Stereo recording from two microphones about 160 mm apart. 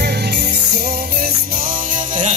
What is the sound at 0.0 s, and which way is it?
Music, 90° right.